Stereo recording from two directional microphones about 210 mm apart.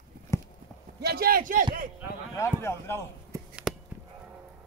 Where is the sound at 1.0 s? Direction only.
45° right (ahead or behind).